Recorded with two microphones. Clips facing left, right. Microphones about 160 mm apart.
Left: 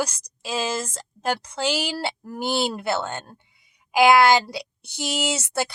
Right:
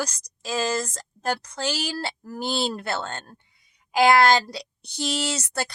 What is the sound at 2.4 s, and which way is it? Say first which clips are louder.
Speech: left 3 dB; 55° left (ahead or behind).